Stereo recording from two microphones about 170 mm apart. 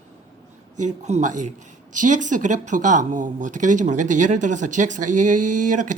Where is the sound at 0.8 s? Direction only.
45° right (ahead or behind).